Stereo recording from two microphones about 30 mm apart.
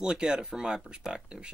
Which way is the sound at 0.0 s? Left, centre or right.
Right.